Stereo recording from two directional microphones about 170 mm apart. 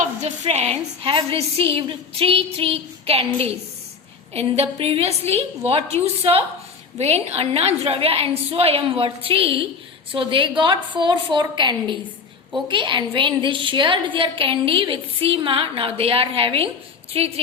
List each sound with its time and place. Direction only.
0.0 s a woman's voice: 40° right (ahead or behind)